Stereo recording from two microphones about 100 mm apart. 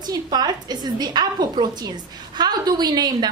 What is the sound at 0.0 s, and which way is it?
A woman's voice, 40° right (ahead or behind).